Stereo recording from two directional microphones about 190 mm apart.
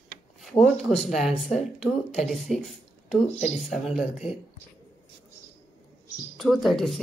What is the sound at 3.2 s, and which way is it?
Speech, 35° left (ahead or behind).